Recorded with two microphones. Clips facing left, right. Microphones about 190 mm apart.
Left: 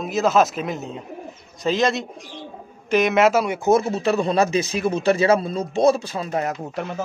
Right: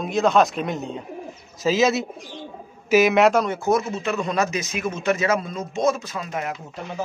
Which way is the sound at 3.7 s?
35° left (ahead or behind).